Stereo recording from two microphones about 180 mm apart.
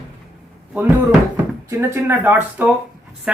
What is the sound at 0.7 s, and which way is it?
A woman's voice, 10° right (ahead or behind).